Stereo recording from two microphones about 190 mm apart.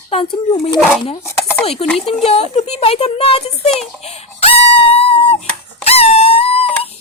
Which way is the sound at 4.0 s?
35° left (ahead or behind).